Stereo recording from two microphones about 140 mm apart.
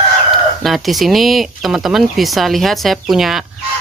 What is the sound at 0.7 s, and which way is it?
Speech, centre (ahead or behind).